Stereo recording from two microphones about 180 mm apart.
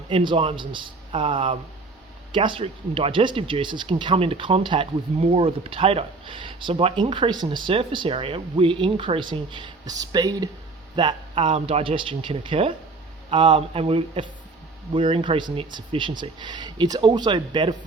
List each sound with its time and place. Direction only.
0.1 s speech: 30° right (ahead or behind)